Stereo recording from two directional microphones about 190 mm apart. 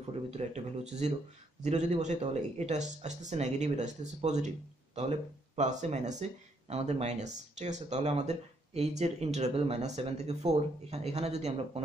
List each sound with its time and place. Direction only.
0.4 s speech: 35° right (ahead or behind)